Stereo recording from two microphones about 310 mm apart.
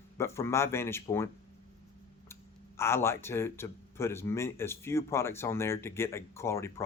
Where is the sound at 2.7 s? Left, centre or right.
Centre.